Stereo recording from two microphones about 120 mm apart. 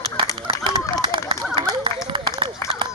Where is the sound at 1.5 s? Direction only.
45° right (ahead or behind).